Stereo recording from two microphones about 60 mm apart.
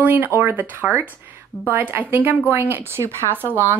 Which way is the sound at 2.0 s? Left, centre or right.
Right.